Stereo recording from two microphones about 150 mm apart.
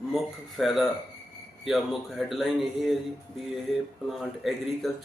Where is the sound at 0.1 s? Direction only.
Centre (ahead or behind).